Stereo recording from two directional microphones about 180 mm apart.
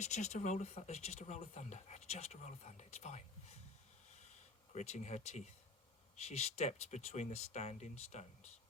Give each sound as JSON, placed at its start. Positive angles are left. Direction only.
{"t": 0.0, "sound": "speech", "side_deg": 40}
{"t": 4.7, "sound": "speech", "side_deg": 40}